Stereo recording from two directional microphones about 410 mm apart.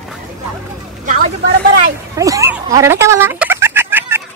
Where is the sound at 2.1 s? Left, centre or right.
Centre.